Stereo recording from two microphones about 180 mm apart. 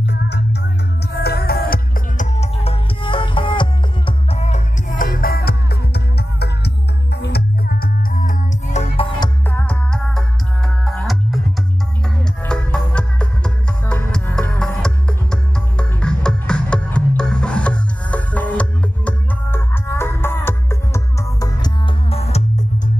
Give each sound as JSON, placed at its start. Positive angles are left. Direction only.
{"t": 0.0, "sound": "music", "side_deg": 70}
{"t": 2.3, "sound": "music", "side_deg": 35}
{"t": 9.5, "sound": "music", "side_deg": 10}
{"t": 12.4, "sound": "music", "side_deg": 5}
{"t": 22.1, "sound": "music", "side_deg": 35}